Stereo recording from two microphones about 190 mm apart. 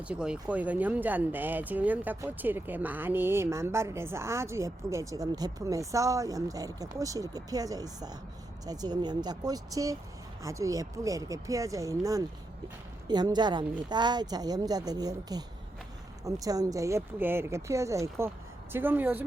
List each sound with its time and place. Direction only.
0.0 s a woman's voice: 5° right (ahead or behind)